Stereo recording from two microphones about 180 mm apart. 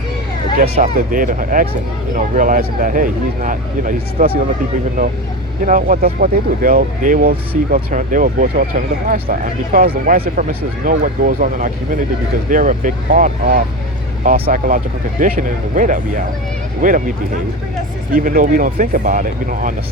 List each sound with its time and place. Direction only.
0.6 s speech: 50° right (ahead or behind)
5.6 s speech: 50° right (ahead or behind)